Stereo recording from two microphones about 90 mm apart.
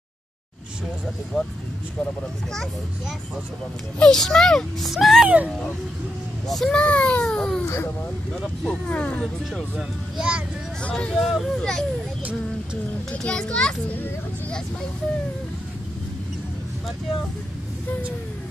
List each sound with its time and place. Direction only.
1.3 s speech: 5° right (ahead or behind)
4.0 s speech: 5° left (ahead or behind)
6.4 s a child's voice: 5° left (ahead or behind)
7.6 s speech: 30° left (ahead or behind)
8.3 s speech: 5° left (ahead or behind)
8.8 s a child's voice: 15° left (ahead or behind)
9.2 s speech: centre (ahead or behind)
10.8 s a child's voice: 10° left (ahead or behind)
11.1 s speech: centre (ahead or behind)
13.1 s a child's voice: 10° left (ahead or behind)